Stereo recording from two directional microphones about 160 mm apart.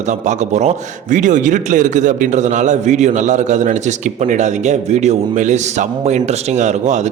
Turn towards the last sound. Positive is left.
turn(degrees=-50)  # may be behind; listen again after turning